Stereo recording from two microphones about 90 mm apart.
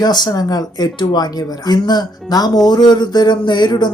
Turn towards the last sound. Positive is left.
turn(degrees=55)  # may be behind; listen again after turning